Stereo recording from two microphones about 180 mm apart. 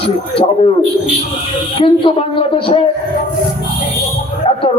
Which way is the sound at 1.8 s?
30° left (ahead or behind).